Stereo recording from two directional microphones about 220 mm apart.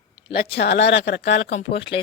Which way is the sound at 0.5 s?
50° left (ahead or behind).